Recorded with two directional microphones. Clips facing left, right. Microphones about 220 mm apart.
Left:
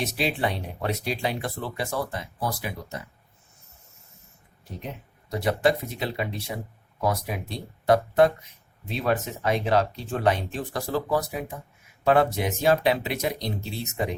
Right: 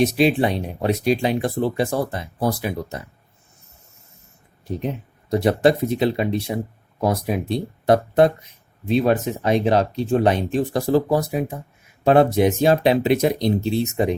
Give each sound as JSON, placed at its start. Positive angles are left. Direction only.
{"t": 0.0, "sound": "speech", "side_deg": -15}
{"t": 5.3, "sound": "speech", "side_deg": -30}